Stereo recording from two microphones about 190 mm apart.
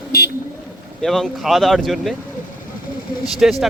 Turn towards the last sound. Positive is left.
turn(degrees=0)  # may be behind; listen again after turning